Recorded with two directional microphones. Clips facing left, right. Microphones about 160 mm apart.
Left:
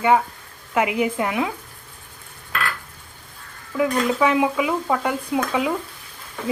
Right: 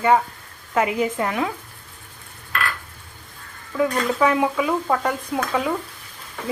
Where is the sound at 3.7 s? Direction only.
10° left (ahead or behind).